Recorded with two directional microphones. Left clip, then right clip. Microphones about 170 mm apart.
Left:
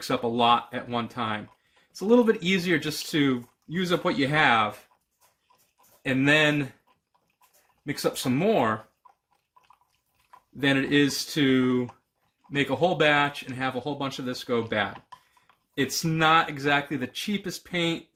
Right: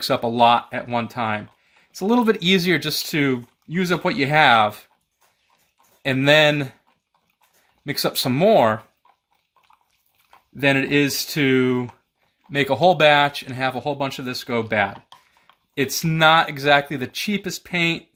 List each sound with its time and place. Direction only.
0.0 s speech: 50° right (ahead or behind)
6.0 s speech: 50° right (ahead or behind)
7.9 s speech: 50° right (ahead or behind)
10.6 s speech: 50° right (ahead or behind)